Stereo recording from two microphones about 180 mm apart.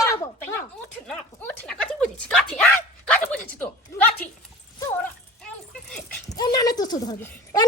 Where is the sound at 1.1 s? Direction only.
5° left (ahead or behind).